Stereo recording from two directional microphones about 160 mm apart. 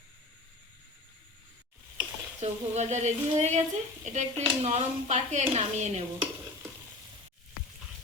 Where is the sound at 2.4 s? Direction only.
45° right (ahead or behind).